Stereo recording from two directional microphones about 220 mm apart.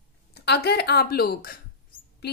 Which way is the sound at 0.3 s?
50° left (ahead or behind).